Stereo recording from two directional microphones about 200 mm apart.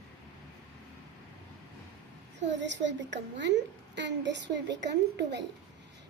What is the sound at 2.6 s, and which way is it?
A woman's voice, 65° right (ahead or behind).